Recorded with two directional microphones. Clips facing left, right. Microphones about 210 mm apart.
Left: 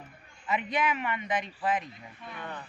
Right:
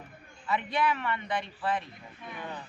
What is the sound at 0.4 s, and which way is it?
A man's voice, 20° left (ahead or behind).